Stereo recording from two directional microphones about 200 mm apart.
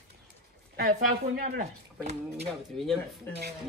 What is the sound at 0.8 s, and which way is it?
Speech, 40° right (ahead or behind).